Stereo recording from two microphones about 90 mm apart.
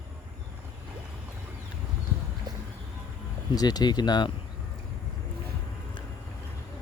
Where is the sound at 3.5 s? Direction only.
45° left (ahead or behind).